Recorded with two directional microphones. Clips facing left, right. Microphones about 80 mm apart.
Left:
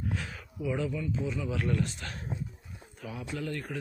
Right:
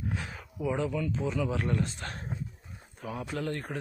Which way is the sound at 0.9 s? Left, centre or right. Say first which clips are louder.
Right 3 dB; right.